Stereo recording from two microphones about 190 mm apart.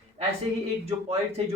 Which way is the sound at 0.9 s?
35° right (ahead or behind).